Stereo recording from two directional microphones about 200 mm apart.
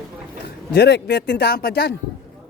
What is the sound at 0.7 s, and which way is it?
Speech, 55° left (ahead or behind).